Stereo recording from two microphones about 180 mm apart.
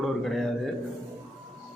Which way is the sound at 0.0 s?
Centre (ahead or behind).